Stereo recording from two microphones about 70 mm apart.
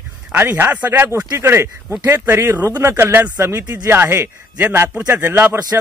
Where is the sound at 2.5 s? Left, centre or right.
Right.